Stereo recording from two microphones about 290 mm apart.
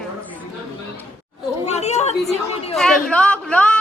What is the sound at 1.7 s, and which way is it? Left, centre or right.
Speech, left.